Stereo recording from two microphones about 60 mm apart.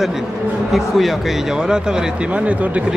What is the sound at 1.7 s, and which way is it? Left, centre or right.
Speech, centre.